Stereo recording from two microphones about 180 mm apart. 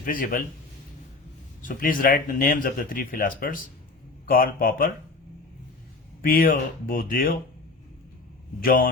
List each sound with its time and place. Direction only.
0.0 s speech: 50° left (ahead or behind)
1.6 s speech: 50° left (ahead or behind)
6.2 s speech: 50° left (ahead or behind)
8.6 s speech: 50° left (ahead or behind)